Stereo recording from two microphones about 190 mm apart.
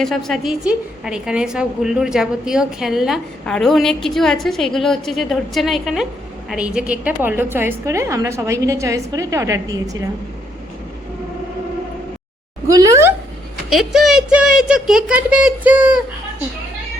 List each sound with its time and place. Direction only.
0.0 s a woman's voice: centre (ahead or behind); by 10.0 s 20° right (ahead or behind)
12.6 s a sound: 20° right (ahead or behind)
13.7 s a woman's voice: centre (ahead or behind)